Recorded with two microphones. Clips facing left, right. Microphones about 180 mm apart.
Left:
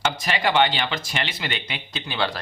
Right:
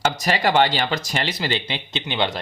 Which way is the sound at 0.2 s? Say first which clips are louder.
Right 2 dB; 40° right (ahead or behind).